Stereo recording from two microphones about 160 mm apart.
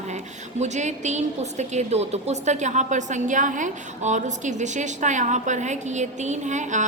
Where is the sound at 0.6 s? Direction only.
45° right (ahead or behind).